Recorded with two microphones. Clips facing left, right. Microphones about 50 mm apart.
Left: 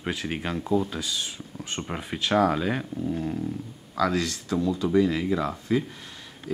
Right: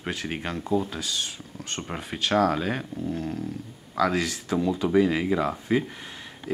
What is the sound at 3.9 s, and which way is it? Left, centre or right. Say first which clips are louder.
Speech: right 1 dB; centre.